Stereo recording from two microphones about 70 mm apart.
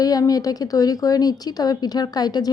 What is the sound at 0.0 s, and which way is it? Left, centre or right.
Speech, left.